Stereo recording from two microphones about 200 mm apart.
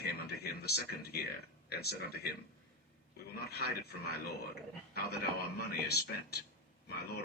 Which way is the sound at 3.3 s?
55° left (ahead or behind).